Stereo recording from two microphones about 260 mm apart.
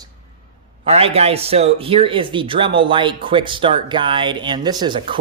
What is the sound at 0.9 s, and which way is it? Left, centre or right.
A man's voice, right.